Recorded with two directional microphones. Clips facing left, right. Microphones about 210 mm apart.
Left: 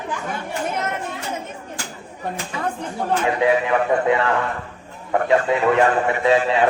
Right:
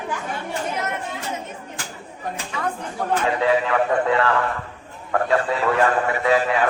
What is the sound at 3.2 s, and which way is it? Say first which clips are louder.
A man's voice: left 2 dB; 15° left (ahead or behind).